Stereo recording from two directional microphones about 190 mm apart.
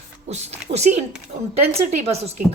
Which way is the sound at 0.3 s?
35° right (ahead or behind).